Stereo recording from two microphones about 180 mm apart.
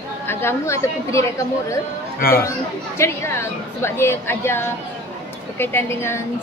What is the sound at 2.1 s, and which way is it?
Speech, 55° left (ahead or behind).